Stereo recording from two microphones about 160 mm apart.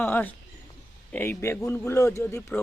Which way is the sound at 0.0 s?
10° left (ahead or behind).